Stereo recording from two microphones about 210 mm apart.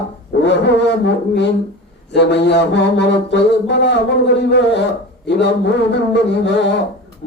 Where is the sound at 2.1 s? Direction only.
55° left (ahead or behind).